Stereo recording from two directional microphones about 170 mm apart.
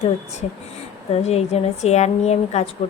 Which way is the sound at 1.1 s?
40° left (ahead or behind).